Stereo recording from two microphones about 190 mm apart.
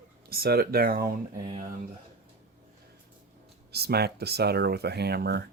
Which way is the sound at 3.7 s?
55° right (ahead or behind).